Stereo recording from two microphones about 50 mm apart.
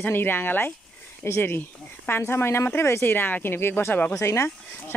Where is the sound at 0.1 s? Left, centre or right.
Left.